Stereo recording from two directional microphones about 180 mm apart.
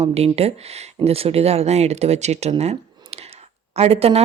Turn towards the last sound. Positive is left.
turn(degrees=-35)  # may be behind; listen again after turning